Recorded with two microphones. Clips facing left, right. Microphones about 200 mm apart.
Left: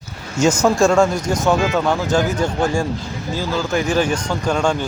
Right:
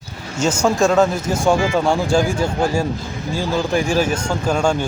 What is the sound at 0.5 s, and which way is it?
Speech, 5° right (ahead or behind).